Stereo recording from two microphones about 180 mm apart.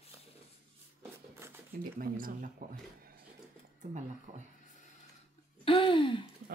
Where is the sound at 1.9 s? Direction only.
50° right (ahead or behind).